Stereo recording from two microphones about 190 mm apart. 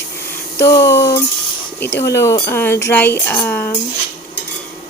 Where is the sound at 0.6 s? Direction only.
15° left (ahead or behind).